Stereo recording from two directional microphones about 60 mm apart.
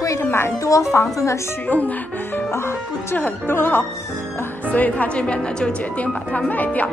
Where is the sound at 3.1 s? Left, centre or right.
Left.